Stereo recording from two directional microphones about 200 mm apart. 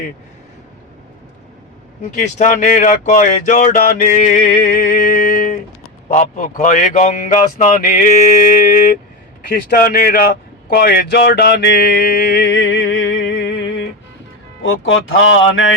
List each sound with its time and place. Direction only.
2.0 s speech: 35° left (ahead or behind); by 15.7 s 75° left (ahead or behind)